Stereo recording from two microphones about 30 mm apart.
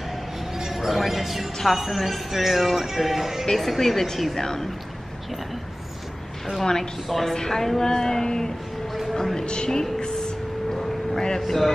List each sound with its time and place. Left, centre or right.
0.6 s music: centre
1.6 s speech: centre
3.5 s speech: centre
4.4 s speech: centre
6.6 s speech: centre
7.1 s speech: centre
7.3 s a woman's voice: centre
9.9 s music: left
11.3 s speech: centre